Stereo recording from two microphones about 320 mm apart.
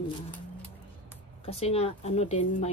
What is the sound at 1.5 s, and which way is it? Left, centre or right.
Speech, centre.